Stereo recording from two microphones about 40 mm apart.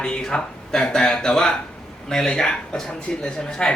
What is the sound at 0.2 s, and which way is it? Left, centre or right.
Speech, centre.